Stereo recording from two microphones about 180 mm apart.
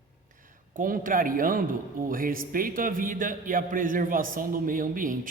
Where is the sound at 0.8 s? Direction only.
50° right (ahead or behind).